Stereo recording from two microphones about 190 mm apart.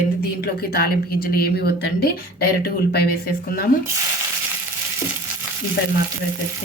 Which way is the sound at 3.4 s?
50° left (ahead or behind).